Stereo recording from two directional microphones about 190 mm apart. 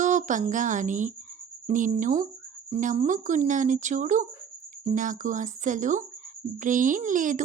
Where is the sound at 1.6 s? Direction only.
40° right (ahead or behind).